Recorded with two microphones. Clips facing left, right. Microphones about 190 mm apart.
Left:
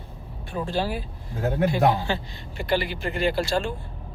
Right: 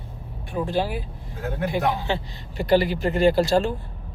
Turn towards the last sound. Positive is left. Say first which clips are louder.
# right 6 dB
turn(degrees=-40)  # may be behind; listen again after turning